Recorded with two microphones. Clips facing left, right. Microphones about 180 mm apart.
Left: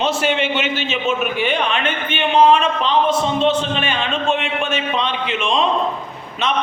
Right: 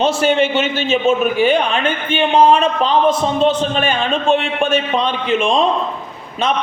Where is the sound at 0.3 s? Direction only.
45° right (ahead or behind).